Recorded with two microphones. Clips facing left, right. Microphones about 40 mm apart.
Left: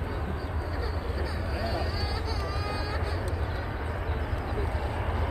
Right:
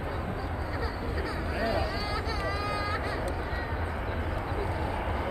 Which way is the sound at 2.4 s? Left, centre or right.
Right.